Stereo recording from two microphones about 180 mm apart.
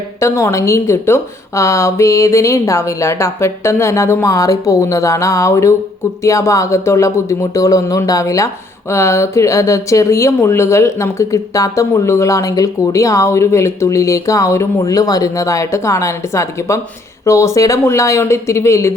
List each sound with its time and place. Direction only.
0.2 s speech: 15° left (ahead or behind)